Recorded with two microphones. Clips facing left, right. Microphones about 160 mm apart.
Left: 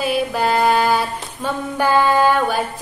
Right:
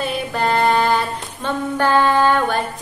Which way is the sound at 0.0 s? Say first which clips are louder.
Left 2 dB; 5° left (ahead or behind).